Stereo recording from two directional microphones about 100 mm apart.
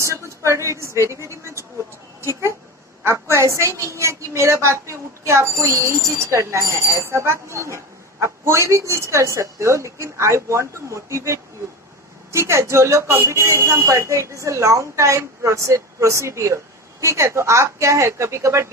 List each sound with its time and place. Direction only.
0.0 s speech: 30° right (ahead or behind)
1.1 s a sound: 30° right (ahead or behind)
3.0 s a woman's voice: 25° right (ahead or behind)